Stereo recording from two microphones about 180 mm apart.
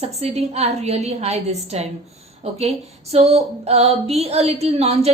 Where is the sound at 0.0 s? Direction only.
35° right (ahead or behind).